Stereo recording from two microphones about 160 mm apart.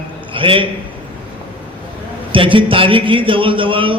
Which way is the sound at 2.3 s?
35° right (ahead or behind).